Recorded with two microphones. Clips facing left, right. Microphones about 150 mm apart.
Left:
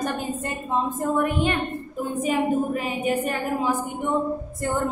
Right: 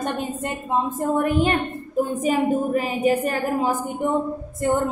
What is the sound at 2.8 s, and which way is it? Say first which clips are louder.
Speech: right 4 dB; 40° right (ahead or behind).